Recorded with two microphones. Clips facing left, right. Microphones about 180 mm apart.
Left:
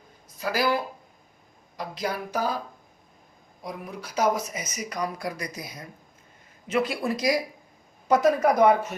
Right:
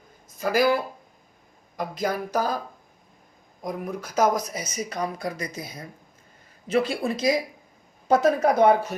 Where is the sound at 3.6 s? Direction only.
45° right (ahead or behind).